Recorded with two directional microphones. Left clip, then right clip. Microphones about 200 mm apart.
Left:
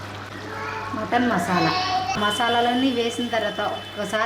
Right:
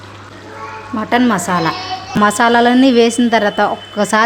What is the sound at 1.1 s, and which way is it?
A woman's voice, 55° right (ahead or behind).